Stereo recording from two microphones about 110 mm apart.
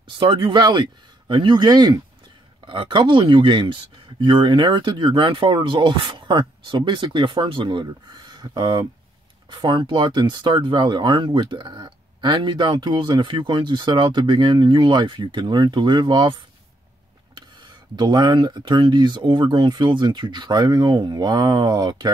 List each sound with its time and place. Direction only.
0.2 s speech: 50° right (ahead or behind)
17.6 s speech: 45° right (ahead or behind)